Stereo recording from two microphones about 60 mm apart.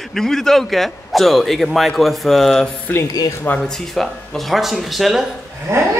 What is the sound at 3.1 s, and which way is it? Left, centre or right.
Speech, left.